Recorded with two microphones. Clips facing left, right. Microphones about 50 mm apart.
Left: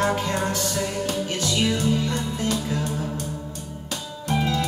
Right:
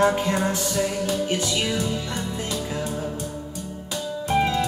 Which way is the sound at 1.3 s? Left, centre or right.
Right.